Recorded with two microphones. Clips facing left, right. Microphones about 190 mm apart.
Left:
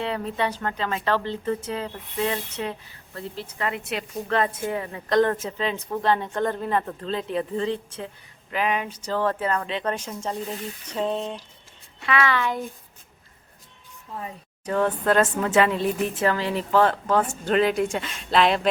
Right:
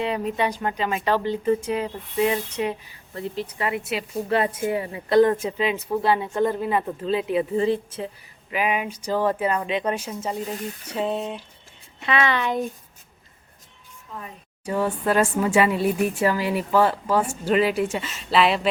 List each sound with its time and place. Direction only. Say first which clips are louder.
0.0 s speech: right 2 dB; 15° right (ahead or behind)
11.9 s speech: right 1 dB; 25° right (ahead or behind)
14.6 s speech: left 1 dB; 10° right (ahead or behind)